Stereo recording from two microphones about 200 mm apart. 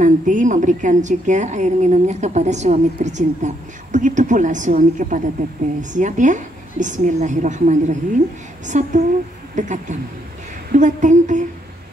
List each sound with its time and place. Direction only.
0.0 s a woman's voice: 40° right (ahead or behind)